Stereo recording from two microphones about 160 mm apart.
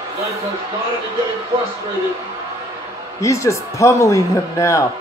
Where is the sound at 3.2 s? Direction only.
20° left (ahead or behind).